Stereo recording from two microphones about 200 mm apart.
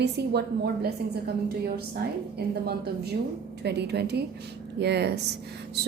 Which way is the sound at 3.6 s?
55° right (ahead or behind).